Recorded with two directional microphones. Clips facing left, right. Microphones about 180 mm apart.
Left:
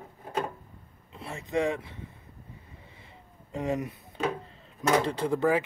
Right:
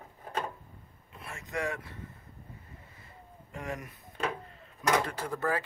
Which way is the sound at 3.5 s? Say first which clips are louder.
Left 8 dB; 20° left (ahead or behind).